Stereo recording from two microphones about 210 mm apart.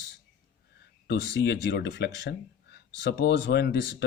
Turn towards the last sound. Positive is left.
turn(degrees=50)  # may be behind; listen again after turning